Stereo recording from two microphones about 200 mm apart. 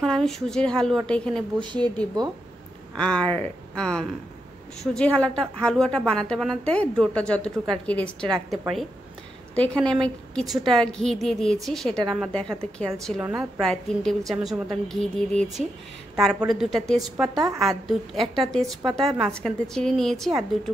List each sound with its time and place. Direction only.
0.0 s a woman's voice: centre (ahead or behind)
1.6 s speech: 25° right (ahead or behind)
3.0 s a woman's voice: 5° left (ahead or behind)
10.0 s a woman's voice: centre (ahead or behind)